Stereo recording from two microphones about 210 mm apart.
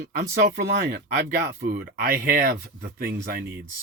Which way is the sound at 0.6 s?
55° right (ahead or behind).